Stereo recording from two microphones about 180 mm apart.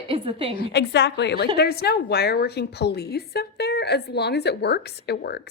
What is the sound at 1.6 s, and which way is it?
A woman's voice, 60° left (ahead or behind).